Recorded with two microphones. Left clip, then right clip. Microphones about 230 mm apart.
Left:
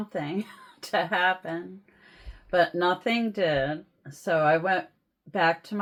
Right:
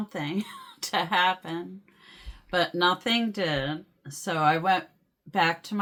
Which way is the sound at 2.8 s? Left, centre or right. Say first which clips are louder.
Right 1 dB; right.